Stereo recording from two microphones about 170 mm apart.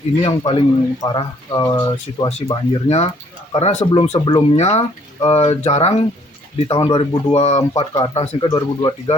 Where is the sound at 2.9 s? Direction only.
40° left (ahead or behind).